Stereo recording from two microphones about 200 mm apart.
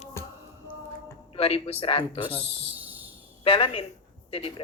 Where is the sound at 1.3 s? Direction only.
30° left (ahead or behind).